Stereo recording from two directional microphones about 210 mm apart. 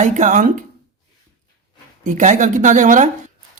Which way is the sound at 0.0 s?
35° right (ahead or behind).